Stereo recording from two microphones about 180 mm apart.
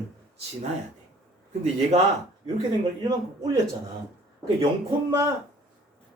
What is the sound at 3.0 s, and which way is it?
Speech, 20° right (ahead or behind).